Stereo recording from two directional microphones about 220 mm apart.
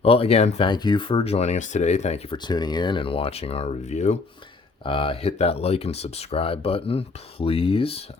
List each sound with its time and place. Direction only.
0.0 s speech: 25° left (ahead or behind)